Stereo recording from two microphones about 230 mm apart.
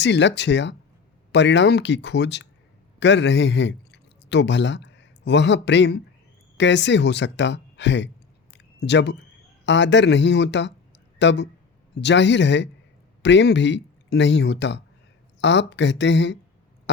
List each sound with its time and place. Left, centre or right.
0.0 s a man's voice: left
8.5 s a sound: left
9.6 s speech: left